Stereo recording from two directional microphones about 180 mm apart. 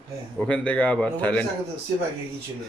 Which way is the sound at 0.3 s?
5° left (ahead or behind).